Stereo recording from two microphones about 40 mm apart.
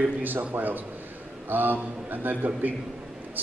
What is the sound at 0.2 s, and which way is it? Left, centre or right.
A man's voice, right.